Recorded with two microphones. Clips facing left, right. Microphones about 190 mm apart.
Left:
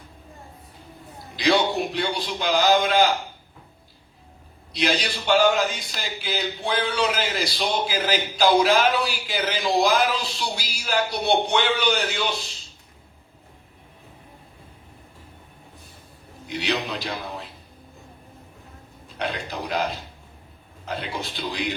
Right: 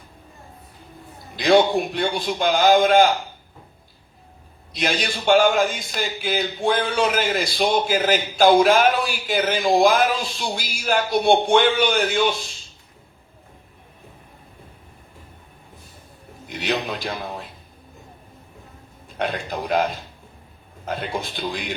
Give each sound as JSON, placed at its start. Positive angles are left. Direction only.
{"t": 1.4, "sound": "a man's voice", "side_deg": -50}
{"t": 4.7, "sound": "a man's voice", "side_deg": -50}
{"t": 16.5, "sound": "a man's voice", "side_deg": -50}
{"t": 19.0, "sound": "a man's voice", "side_deg": -50}